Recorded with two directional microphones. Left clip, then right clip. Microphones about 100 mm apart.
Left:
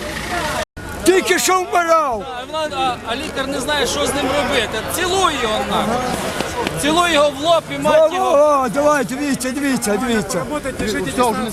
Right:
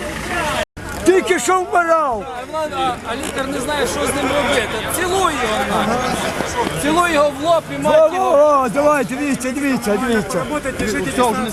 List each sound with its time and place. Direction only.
1.0 s speech: 40° left (ahead or behind)
2.6 s speech: 5° left (ahead or behind)
3.3 s speech: 60° left (ahead or behind)
3.9 s speech: 5° left (ahead or behind)
5.7 s speech: centre (ahead or behind)
6.8 s a man's voice: 55° left (ahead or behind)
8.2 s speech: 10° left (ahead or behind)
8.6 s speech: 35° left (ahead or behind)
10.3 s speech: 5° left (ahead or behind)